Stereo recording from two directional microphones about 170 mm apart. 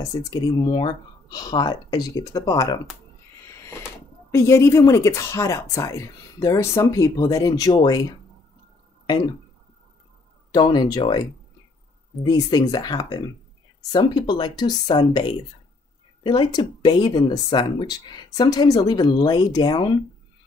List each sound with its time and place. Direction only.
0.0 s speech: 25° left (ahead or behind)
4.3 s speech: 15° left (ahead or behind)
10.5 s speech: 25° left (ahead or behind)
12.3 s speech: 25° left (ahead or behind)